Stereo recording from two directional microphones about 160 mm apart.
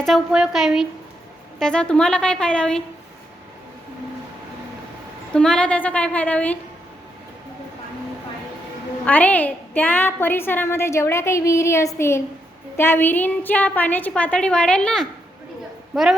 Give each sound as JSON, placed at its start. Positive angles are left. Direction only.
{"t": 0.0, "sound": "a woman's voice", "side_deg": 0}
{"t": 5.3, "sound": "a woman's voice", "side_deg": 5}
{"t": 9.0, "sound": "a woman's voice", "side_deg": 10}